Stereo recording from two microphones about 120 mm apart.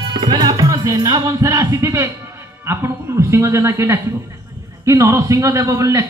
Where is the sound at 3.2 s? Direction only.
25° right (ahead or behind).